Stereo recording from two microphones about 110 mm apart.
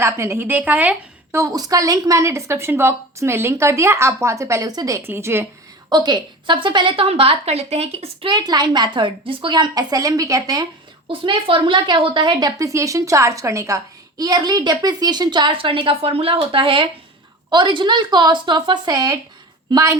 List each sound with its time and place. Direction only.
0.0 s a woman's voice: 25° right (ahead or behind)
1.4 s a woman's voice: 35° right (ahead or behind)
5.9 s a woman's voice: 40° right (ahead or behind); by 8.3 s 65° right (ahead or behind)
8.3 s a woman's voice: 40° right (ahead or behind)
11.1 s a woman's voice: 50° right (ahead or behind); by 19.2 s 35° right (ahead or behind)